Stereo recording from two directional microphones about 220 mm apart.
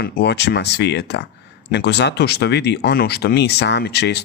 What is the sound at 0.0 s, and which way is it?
Speech, 50° left (ahead or behind).